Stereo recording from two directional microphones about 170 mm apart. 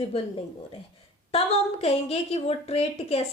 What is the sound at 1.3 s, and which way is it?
A woman's voice, 35° left (ahead or behind).